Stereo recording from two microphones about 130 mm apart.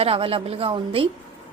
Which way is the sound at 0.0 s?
45° right (ahead or behind).